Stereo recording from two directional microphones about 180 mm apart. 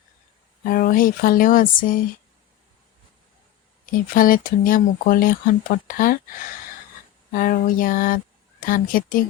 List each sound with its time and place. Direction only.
0.6 s speech: 50° left (ahead or behind)
3.9 s speech: 50° left (ahead or behind)
7.3 s speech: 55° left (ahead or behind)